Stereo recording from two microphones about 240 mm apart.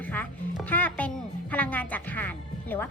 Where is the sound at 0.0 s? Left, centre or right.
Centre.